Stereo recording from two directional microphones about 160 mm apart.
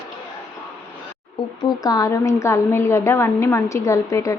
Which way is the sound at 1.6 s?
25° left (ahead or behind).